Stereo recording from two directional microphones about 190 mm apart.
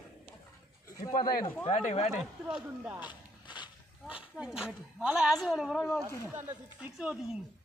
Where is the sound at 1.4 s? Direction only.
10° left (ahead or behind).